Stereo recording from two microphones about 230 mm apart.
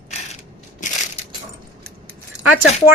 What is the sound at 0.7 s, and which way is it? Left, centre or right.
Crushing, left.